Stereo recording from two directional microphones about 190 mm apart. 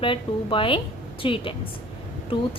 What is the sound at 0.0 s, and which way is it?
A woman's voice, 25° left (ahead or behind).